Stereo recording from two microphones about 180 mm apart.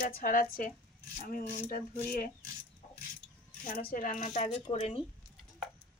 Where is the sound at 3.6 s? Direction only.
50° left (ahead or behind).